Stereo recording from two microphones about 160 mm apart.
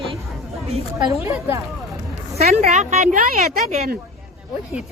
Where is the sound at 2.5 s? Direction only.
45° right (ahead or behind).